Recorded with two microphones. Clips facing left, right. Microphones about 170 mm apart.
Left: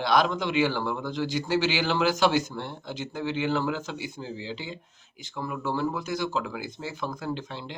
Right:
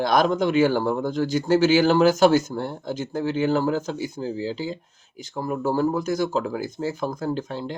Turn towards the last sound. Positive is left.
turn(degrees=-45)  # may be behind; listen again after turning